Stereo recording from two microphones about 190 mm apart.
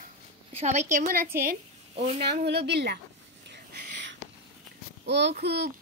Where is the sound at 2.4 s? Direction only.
60° right (ahead or behind).